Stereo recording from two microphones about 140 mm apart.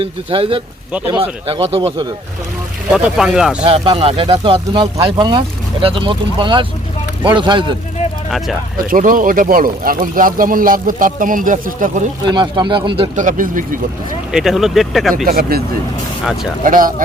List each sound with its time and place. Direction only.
0.0 s speech: 40° right (ahead or behind)
2.9 s speech: 5° right (ahead or behind)
3.6 s speech: 40° right (ahead or behind)
8.9 s speech: 75° right (ahead or behind)
12.3 s speech: 35° right (ahead or behind)
13.1 s speech: 70° right (ahead or behind)
14.3 s speech: centre (ahead or behind)
15.3 s speech: 90° right
16.6 s speech: 75° right (ahead or behind)